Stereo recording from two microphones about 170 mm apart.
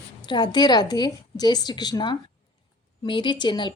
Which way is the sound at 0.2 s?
25° left (ahead or behind).